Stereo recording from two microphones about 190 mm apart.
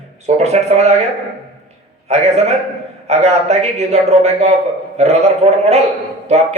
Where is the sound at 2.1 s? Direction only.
35° right (ahead or behind).